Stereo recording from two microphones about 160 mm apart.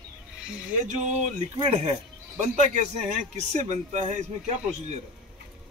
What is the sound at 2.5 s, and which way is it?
A man's voice, 45° right (ahead or behind).